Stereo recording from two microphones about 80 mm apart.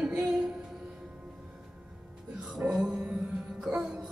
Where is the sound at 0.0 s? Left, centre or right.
Centre.